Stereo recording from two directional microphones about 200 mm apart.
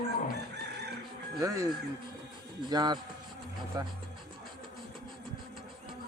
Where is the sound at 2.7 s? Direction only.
20° right (ahead or behind).